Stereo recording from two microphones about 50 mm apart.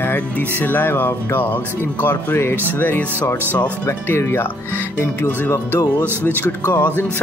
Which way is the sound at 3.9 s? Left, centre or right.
Left.